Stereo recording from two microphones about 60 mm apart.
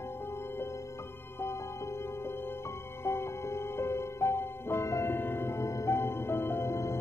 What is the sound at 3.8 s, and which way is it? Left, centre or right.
Music, left.